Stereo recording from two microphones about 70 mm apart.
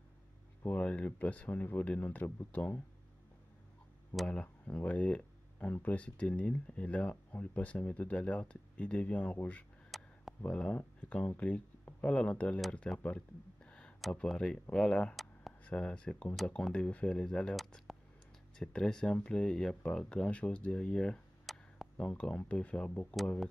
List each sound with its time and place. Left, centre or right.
0.7 s speech: centre
4.3 s speech: left
9.8 s a sound: centre
10.4 s speech: centre
13.7 s a sound: centre
14.1 s speech: centre
17.6 s speech: centre